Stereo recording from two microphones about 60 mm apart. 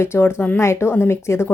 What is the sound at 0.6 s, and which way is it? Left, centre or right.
Speech, left.